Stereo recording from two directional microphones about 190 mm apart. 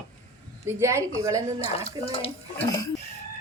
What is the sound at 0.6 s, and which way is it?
Speech, 15° right (ahead or behind).